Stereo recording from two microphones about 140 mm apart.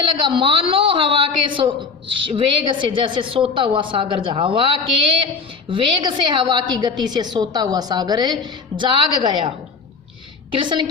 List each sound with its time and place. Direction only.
0.0 s a woman's voice: 35° right (ahead or behind)
10.5 s a woman's voice: 35° right (ahead or behind)